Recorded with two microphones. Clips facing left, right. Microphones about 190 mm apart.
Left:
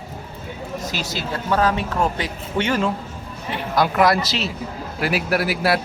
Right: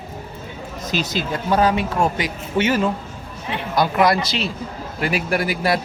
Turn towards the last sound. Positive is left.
turn(degrees=5)  # may be behind; listen again after turning